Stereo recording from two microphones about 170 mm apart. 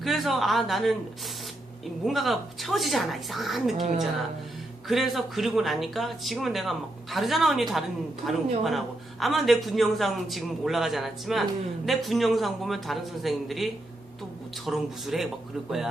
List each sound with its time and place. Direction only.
0.0 s speech: centre (ahead or behind)
2.0 s speech: centre (ahead or behind)
3.8 s a woman's voice: 45° right (ahead or behind)
4.9 s speech: centre (ahead or behind)